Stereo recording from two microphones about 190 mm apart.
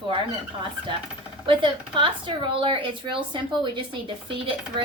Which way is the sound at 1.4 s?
25° right (ahead or behind).